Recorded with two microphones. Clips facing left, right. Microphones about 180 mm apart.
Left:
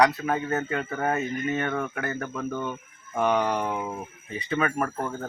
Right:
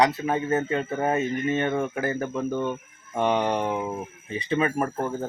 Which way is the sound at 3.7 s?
10° right (ahead or behind).